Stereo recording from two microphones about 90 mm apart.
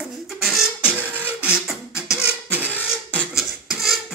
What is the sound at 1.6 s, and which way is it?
Beatboxing, 10° right (ahead or behind).